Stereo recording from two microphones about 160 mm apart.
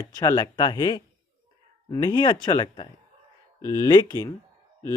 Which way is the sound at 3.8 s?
25° left (ahead or behind).